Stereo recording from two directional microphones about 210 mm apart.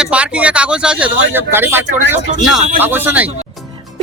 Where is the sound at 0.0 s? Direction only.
5° right (ahead or behind).